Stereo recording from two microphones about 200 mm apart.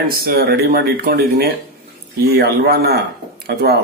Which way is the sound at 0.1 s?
50° right (ahead or behind).